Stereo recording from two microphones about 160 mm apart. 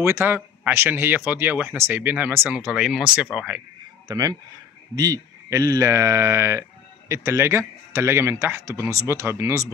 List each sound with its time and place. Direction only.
0.0 s speech: 15° right (ahead or behind)
4.1 s speech: 25° right (ahead or behind)